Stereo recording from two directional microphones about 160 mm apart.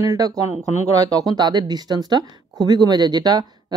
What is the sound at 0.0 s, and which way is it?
Speech, 20° right (ahead or behind).